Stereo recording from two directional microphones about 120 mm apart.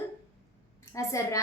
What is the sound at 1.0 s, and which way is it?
Speech, 25° left (ahead or behind).